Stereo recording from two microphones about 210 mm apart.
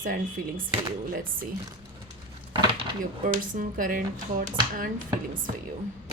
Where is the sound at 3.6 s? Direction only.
40° right (ahead or behind).